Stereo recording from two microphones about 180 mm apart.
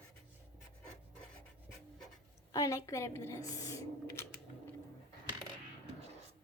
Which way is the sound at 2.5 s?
20° left (ahead or behind).